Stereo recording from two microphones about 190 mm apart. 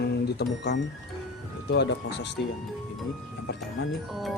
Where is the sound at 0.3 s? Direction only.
60° left (ahead or behind).